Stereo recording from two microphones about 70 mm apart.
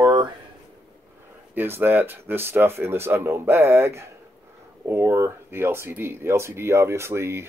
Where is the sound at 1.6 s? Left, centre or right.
Right.